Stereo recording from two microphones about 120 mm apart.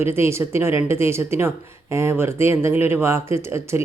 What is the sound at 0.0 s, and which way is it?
Speech, 20° right (ahead or behind).